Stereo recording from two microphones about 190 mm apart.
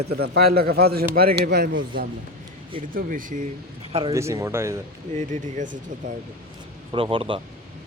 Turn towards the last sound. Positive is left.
turn(degrees=-25)  # may be behind; listen again after turning